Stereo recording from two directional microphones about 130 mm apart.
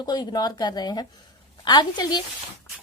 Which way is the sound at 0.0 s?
30° left (ahead or behind).